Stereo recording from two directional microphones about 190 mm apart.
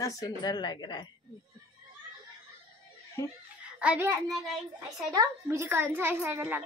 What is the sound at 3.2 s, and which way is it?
Speech, 15° left (ahead or behind).